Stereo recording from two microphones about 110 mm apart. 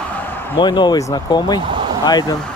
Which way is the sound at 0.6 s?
45° left (ahead or behind).